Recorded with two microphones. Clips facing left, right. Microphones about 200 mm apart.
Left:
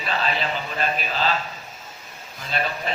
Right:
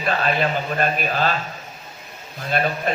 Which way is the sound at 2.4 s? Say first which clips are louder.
Right 5 dB; 50° right (ahead or behind).